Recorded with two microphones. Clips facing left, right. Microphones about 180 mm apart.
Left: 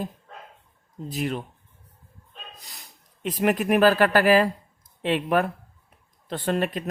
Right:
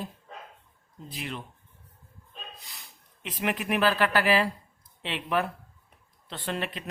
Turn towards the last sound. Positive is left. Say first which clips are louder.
# left 8 dB
turn(degrees=45)  # may be behind; listen again after turning